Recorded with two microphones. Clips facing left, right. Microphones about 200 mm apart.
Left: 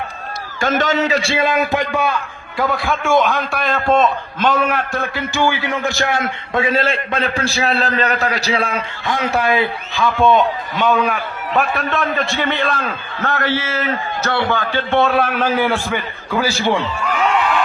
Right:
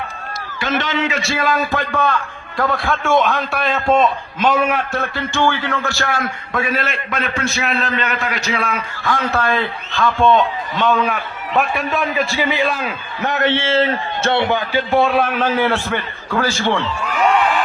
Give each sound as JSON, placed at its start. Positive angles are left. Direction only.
{"t": 0.6, "sound": "a man's voice", "side_deg": 45}
{"t": 9.0, "sound": "a man's voice", "side_deg": 15}
{"t": 14.8, "sound": "a man's voice", "side_deg": 0}